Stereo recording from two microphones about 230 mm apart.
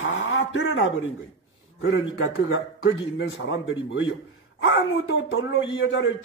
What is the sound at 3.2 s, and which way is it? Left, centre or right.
Speech, left.